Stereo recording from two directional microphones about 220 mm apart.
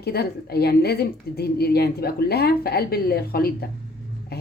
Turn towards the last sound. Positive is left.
turn(degrees=45)  # may be behind; listen again after turning